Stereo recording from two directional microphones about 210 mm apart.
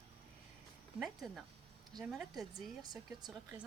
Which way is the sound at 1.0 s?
Centre (ahead or behind).